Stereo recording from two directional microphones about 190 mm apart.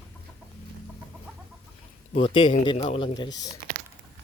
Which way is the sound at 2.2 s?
25° left (ahead or behind).